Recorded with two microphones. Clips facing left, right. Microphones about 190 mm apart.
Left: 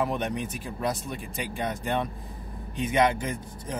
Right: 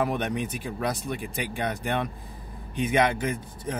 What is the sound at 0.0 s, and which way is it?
Speech, 70° right (ahead or behind).